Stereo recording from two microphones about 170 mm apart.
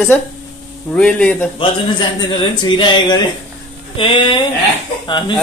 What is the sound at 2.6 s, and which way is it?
Speech, 30° left (ahead or behind).